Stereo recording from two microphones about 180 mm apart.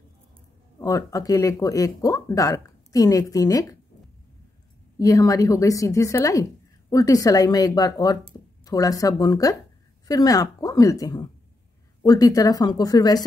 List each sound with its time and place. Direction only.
0.7 s speech: 20° left (ahead or behind)
4.9 s a woman's voice: 20° left (ahead or behind)